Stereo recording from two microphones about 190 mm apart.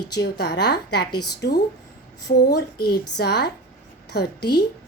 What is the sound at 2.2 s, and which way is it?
A woman's voice, 60° left (ahead or behind).